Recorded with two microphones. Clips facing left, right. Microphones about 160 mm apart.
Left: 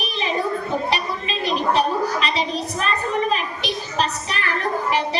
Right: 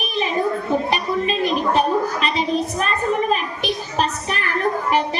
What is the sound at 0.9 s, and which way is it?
Speech, 50° right (ahead or behind).